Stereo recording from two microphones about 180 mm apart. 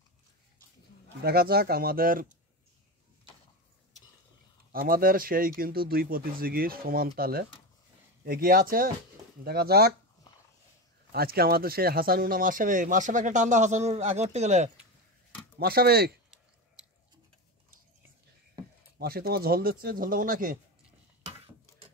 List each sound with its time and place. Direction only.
1.2 s speech: 60° right (ahead or behind)
4.7 s speech: 55° right (ahead or behind)
11.1 s speech: 60° right (ahead or behind); by 14.7 s 40° right (ahead or behind)
15.6 s speech: 60° right (ahead or behind)
18.9 s speech: 60° right (ahead or behind)